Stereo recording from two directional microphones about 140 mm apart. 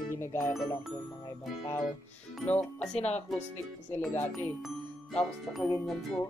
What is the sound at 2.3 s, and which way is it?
Speech, 5° left (ahead or behind).